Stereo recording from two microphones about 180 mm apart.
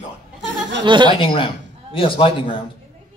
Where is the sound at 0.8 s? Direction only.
25° right (ahead or behind).